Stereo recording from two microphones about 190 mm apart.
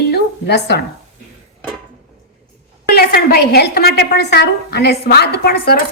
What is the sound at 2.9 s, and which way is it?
A woman's voice, 55° left (ahead or behind).